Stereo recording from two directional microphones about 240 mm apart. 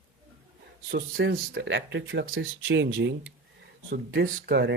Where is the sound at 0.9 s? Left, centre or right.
Right.